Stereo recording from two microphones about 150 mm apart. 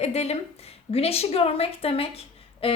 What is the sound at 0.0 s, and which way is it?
A woman's voice, 45° left (ahead or behind).